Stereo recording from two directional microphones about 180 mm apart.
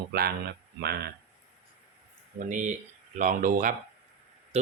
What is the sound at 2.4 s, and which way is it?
Speech, 45° right (ahead or behind).